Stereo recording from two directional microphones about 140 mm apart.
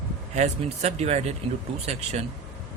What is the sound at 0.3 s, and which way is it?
Speech, 50° right (ahead or behind).